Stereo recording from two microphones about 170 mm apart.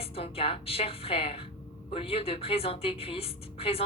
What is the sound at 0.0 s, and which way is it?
A woman's voice, 35° left (ahead or behind).